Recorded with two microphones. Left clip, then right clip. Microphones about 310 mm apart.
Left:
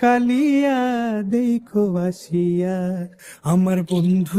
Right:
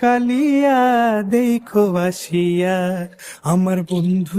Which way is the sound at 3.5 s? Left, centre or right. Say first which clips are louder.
Right 2 dB; centre.